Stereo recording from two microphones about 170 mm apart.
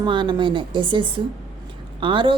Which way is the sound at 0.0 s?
30° right (ahead or behind).